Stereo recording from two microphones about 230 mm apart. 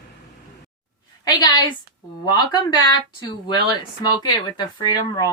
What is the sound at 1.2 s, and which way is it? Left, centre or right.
Speech, centre.